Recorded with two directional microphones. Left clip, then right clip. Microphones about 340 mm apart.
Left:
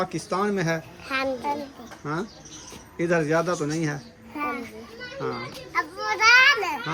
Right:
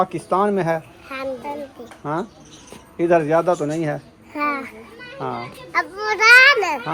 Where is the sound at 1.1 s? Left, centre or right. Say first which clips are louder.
Left 3 dB; left.